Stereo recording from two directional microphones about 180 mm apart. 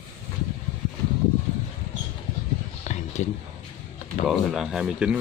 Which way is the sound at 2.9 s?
40° left (ahead or behind).